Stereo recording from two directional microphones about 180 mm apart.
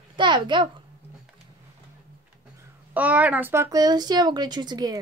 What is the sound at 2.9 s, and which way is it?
Speech, 10° right (ahead or behind).